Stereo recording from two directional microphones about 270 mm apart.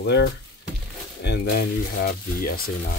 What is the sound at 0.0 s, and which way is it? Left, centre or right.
Speech, left.